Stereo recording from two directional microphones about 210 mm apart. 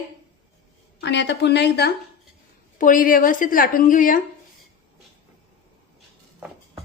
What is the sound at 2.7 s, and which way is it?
A woman's voice, 40° left (ahead or behind).